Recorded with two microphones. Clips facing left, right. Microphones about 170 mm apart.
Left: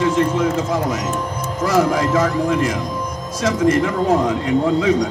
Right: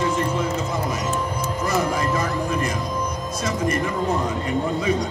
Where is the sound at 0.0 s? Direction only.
90° left.